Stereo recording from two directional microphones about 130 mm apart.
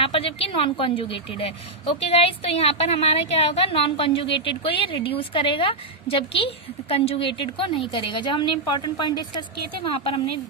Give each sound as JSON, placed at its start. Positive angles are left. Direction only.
{"t": 0.0, "sound": "a woman's voice", "side_deg": 45}
{"t": 9.9, "sound": "a woman's voice", "side_deg": 50}